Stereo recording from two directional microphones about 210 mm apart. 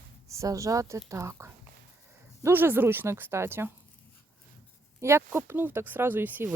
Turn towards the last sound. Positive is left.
turn(degrees=-10)  # may be behind; listen again after turning